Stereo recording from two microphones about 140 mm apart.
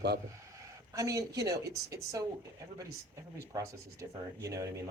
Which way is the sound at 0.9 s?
25° right (ahead or behind).